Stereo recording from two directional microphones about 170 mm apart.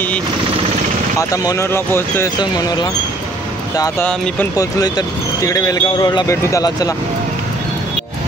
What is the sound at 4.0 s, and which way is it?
Speech, 10° left (ahead or behind).